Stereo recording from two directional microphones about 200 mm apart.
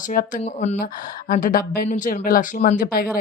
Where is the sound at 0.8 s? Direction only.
45° left (ahead or behind).